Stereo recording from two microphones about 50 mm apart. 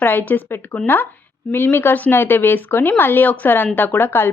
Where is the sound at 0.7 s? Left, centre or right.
Left.